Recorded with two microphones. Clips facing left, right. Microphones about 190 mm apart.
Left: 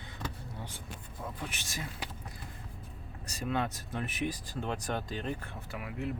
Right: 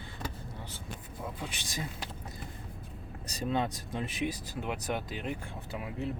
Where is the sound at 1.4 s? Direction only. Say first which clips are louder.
Right 1 dB; 15° right (ahead or behind).